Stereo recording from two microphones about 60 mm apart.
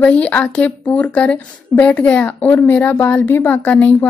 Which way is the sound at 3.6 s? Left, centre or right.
Left.